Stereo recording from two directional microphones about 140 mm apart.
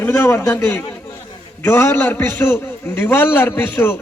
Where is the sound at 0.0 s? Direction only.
15° left (ahead or behind).